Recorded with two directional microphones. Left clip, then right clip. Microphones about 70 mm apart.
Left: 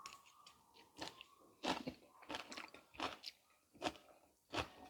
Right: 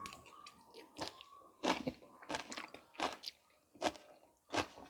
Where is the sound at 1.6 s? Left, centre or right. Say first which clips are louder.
Right 5 dB; centre.